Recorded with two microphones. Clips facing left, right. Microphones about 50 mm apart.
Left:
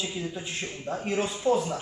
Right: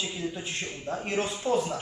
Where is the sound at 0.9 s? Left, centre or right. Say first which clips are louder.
Left 1 dB; left.